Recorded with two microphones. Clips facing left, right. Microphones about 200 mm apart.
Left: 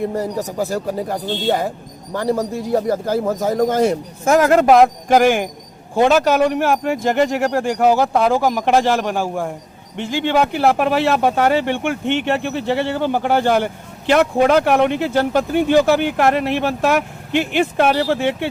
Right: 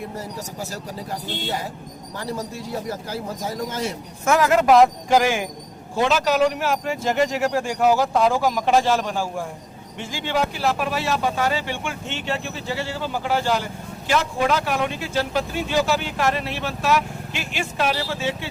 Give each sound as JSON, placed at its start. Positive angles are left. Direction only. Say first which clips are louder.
{"t": 0.6, "sound": "a man's voice", "louder": "left 12 dB", "side_deg": 55}